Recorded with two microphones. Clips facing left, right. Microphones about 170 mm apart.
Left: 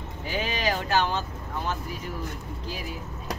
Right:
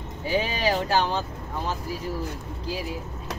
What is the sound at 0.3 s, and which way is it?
Speech, 30° right (ahead or behind).